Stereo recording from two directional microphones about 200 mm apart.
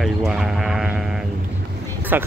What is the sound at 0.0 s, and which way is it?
Sheep, centre (ahead or behind).